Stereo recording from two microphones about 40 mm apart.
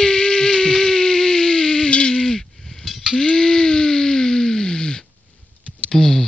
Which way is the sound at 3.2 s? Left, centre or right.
Centre.